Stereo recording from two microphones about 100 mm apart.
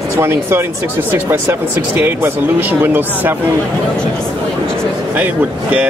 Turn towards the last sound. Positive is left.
turn(degrees=-15)  # may be behind; listen again after turning